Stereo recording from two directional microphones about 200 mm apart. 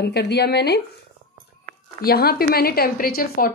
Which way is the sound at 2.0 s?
50° left (ahead or behind).